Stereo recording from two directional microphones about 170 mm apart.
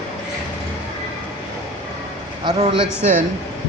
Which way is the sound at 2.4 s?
30° right (ahead or behind).